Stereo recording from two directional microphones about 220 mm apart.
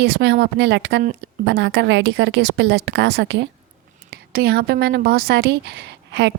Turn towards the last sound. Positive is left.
turn(degrees=-55)  # may be behind; listen again after turning